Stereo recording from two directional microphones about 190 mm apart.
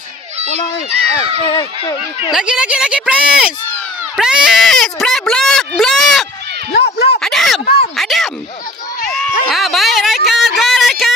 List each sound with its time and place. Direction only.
1.4 s speech: 25° left (ahead or behind)
2.3 s speech: 5° right (ahead or behind)
6.7 s speech: 60° left (ahead or behind)
7.2 s a sound: centre (ahead or behind)
7.9 s speech: centre (ahead or behind)
9.1 s a sound: centre (ahead or behind)